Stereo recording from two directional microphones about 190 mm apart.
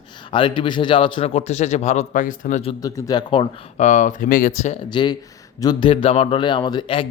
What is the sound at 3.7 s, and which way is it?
Speech, 40° left (ahead or behind).